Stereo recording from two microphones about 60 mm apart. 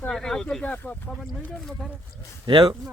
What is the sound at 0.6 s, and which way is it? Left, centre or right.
Speech, left.